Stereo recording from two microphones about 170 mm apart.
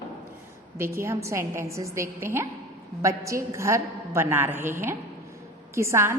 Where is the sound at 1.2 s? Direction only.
15° right (ahead or behind).